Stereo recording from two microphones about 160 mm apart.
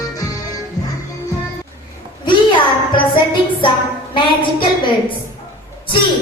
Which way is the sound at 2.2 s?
30° left (ahead or behind).